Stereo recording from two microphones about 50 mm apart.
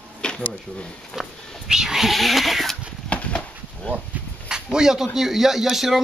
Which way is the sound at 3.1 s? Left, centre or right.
Left.